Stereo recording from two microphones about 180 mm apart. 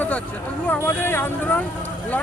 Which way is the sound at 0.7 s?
10° left (ahead or behind).